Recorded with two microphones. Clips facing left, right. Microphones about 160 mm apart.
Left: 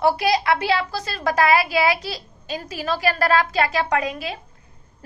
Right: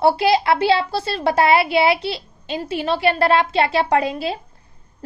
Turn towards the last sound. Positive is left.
turn(degrees=-30)  # may be behind; listen again after turning